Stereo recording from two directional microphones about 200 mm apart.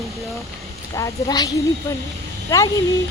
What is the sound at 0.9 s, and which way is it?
Speech, 20° left (ahead or behind).